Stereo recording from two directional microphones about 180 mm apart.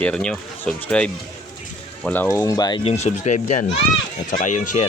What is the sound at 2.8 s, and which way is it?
Speech, 40° left (ahead or behind).